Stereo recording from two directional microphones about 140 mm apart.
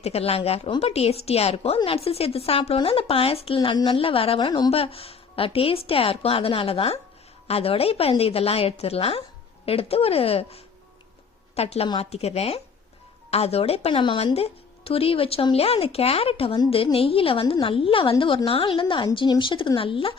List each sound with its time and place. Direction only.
0.0 s a woman's voice: 45° left (ahead or behind); by 4.7 s 30° left (ahead or behind)
4.7 s a woman's voice: 45° left (ahead or behind)
14.0 s a woman's voice: 35° left (ahead or behind)